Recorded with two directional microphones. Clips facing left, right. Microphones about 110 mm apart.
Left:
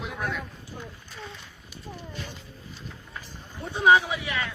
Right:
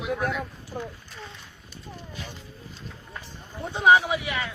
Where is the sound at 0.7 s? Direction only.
55° right (ahead or behind).